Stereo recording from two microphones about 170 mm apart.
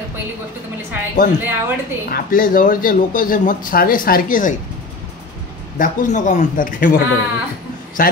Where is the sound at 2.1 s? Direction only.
55° left (ahead or behind).